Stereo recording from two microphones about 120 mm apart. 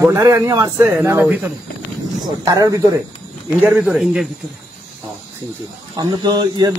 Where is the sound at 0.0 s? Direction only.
25° right (ahead or behind).